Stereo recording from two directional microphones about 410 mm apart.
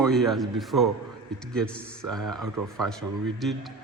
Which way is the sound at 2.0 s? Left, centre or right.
Right.